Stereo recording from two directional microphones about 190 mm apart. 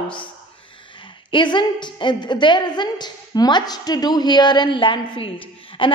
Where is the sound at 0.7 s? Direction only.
25° left (ahead or behind).